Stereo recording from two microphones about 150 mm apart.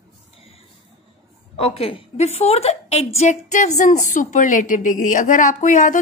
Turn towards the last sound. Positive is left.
turn(degrees=55)  # may be behind; listen again after turning